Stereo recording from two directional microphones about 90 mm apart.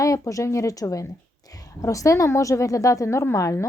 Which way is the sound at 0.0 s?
40° left (ahead or behind).